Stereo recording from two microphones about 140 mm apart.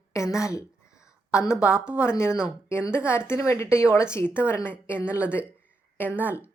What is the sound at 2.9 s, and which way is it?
A woman's voice, 20° left (ahead or behind).